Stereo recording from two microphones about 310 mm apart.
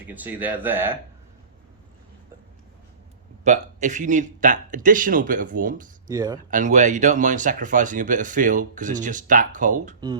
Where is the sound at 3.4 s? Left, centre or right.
Right.